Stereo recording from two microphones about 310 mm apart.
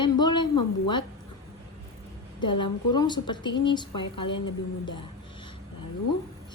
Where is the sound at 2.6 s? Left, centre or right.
Centre.